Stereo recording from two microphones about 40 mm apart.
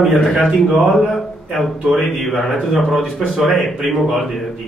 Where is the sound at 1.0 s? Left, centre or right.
Centre.